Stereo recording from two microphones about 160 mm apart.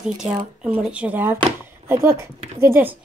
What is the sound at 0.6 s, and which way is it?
Speech, 5° right (ahead or behind).